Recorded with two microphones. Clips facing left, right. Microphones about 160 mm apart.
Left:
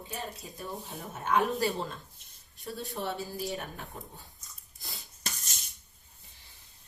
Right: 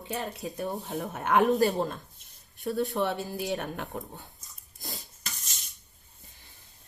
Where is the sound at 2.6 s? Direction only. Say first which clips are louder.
Right 8 dB; 70° right (ahead or behind).